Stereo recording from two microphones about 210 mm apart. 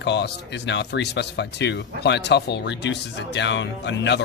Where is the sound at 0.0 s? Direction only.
55° left (ahead or behind).